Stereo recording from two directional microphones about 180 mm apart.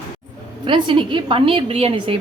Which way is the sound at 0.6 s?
25° right (ahead or behind).